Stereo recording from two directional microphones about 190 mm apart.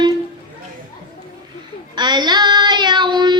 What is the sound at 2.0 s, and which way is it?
Child singing, 20° right (ahead or behind).